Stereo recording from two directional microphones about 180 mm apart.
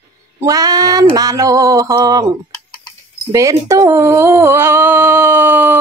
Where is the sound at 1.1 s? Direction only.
20° right (ahead or behind).